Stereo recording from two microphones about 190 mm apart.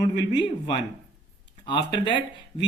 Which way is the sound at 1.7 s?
25° left (ahead or behind).